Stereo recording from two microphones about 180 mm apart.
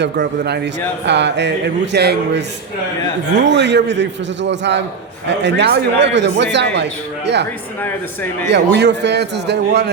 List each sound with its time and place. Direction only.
0.0 s a man's voice: 70° right (ahead or behind)
7.8 s a man's voice: 10° left (ahead or behind)
8.4 s a man's voice: 75° right (ahead or behind)